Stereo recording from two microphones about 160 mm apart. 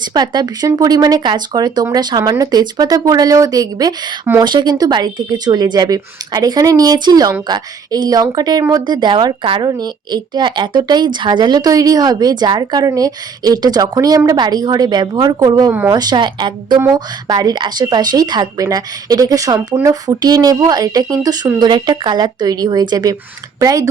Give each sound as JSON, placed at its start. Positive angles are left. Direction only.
{"t": 0.1, "sound": "speech", "side_deg": -25}